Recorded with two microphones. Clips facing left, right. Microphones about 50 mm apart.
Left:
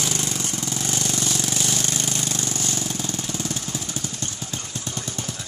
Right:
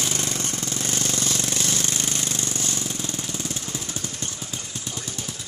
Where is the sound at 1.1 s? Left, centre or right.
Left.